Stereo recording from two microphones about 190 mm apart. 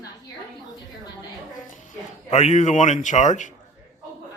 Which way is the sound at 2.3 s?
35° left (ahead or behind).